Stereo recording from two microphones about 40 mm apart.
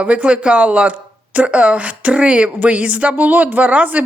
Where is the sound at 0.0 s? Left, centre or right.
Right.